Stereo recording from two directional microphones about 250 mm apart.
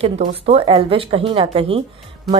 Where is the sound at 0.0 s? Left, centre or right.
Right.